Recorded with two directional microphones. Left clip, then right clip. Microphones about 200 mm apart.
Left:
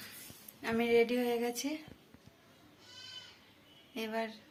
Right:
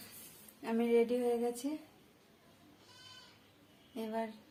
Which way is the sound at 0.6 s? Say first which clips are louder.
Left 2 dB; 5° right (ahead or behind).